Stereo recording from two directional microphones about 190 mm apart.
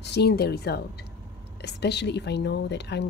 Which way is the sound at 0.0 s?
60° left (ahead or behind).